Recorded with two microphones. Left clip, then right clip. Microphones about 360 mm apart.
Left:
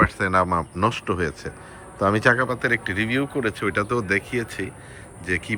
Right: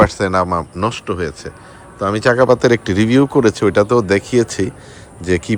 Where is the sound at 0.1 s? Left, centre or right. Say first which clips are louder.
Right 5 dB; centre.